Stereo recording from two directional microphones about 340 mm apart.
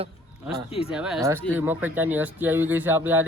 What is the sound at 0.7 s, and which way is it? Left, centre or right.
Speech, centre.